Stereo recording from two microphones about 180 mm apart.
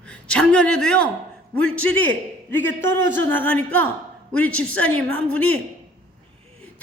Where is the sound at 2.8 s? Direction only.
90° right.